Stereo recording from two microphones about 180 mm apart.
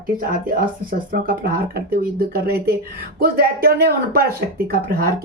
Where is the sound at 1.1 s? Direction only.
55° right (ahead or behind).